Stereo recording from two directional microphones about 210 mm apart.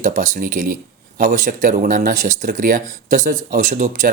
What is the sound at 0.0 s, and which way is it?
Speech, 35° right (ahead or behind).